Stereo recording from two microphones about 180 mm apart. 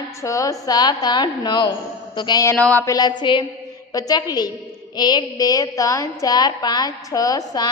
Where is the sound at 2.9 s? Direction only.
25° left (ahead or behind).